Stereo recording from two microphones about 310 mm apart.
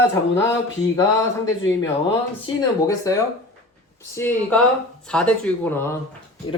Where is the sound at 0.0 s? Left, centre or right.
Centre.